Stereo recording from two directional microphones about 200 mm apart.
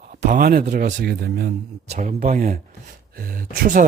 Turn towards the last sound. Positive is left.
turn(degrees=-45)  # may be behind; listen again after turning